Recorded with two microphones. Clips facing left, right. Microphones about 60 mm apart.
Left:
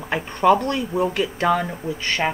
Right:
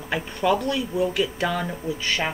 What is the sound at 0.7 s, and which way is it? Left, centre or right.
Speech, left.